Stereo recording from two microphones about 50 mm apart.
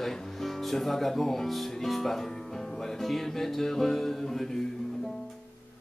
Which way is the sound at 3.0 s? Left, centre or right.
Centre.